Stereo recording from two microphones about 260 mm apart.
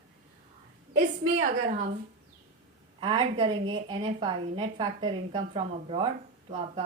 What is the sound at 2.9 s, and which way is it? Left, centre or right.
A woman's voice, centre.